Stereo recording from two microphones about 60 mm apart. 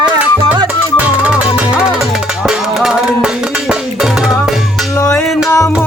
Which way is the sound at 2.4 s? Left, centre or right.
Centre.